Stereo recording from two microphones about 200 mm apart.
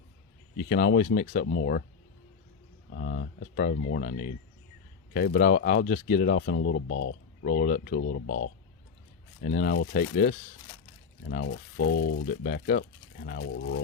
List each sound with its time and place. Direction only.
0.7 s speech: 45° left (ahead or behind)
1.5 s speech: 55° left (ahead or behind)
2.9 s speech: 55° left (ahead or behind); by 7.2 s 70° left (ahead or behind)
7.4 s speech: 50° left (ahead or behind)
7.9 s speech: 70° left (ahead or behind)
9.4 s speech: 50° left (ahead or behind)
11.8 s speech: 80° left
12.4 s speech: 45° left (ahead or behind)
13.6 s speech: 65° left (ahead or behind)